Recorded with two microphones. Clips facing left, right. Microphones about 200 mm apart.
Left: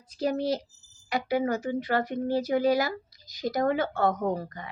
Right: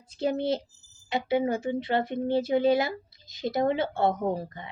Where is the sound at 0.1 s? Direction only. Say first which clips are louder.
Even; 25° right (ahead or behind).